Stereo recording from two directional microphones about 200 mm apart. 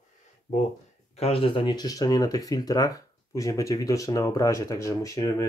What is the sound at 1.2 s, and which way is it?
Speech, 30° left (ahead or behind).